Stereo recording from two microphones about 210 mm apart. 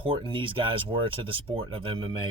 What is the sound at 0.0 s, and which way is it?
Speech, 25° right (ahead or behind).